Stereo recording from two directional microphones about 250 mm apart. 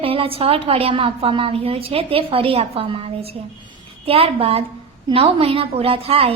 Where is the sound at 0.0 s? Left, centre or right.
Right.